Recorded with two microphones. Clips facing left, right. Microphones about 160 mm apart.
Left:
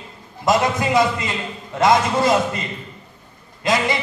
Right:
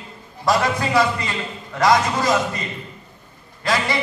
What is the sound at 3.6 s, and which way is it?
Speech, 20° left (ahead or behind).